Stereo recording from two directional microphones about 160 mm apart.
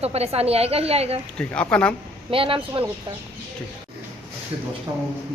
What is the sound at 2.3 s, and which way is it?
Speech, 35° right (ahead or behind).